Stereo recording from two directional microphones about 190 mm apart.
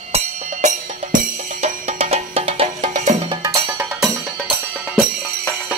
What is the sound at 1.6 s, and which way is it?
Music, 35° right (ahead or behind).